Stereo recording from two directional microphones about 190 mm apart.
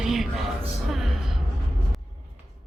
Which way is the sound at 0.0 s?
Centre (ahead or behind).